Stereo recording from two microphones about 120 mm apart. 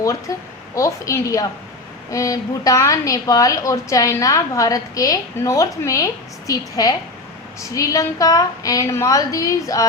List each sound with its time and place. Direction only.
0.0 s a woman's voice: 25° left (ahead or behind)